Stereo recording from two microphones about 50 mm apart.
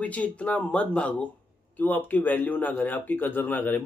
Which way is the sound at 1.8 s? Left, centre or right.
Left.